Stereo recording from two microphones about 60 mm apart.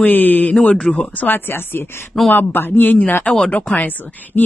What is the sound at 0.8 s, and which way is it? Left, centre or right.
Speech, centre.